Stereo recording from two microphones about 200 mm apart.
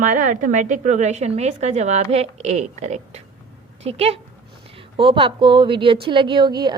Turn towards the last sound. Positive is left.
turn(degrees=-20)  # may be behind; listen again after turning